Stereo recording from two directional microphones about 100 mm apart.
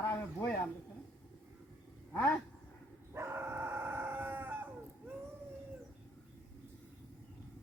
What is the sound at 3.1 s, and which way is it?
Dog, 25° right (ahead or behind).